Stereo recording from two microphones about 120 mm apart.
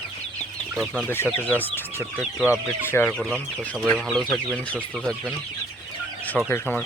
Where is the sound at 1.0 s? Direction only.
15° left (ahead or behind).